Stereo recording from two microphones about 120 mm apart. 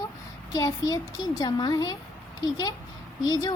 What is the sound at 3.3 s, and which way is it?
Speech, 35° left (ahead or behind).